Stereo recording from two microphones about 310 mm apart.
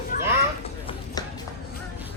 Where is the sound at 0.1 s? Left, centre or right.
Left.